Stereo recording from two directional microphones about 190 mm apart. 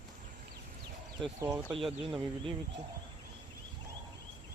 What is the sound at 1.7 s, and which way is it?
Speech, 30° right (ahead or behind).